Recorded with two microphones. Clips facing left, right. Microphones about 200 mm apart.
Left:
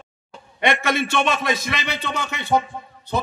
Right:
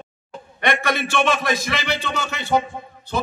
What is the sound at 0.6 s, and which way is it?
A man's voice, 25° left (ahead or behind).